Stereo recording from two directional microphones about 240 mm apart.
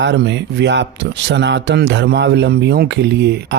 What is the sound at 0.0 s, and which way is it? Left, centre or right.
A man's voice, right.